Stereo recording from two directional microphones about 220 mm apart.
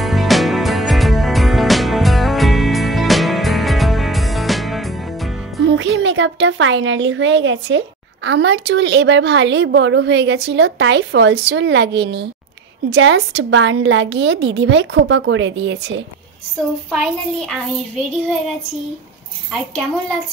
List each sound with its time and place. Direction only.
0.0 s music: centre (ahead or behind)
5.7 s a child's voice: 60° right (ahead or behind)
16.9 s a child's voice: centre (ahead or behind)